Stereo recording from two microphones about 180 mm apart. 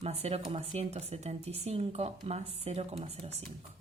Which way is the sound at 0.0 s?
35° right (ahead or behind).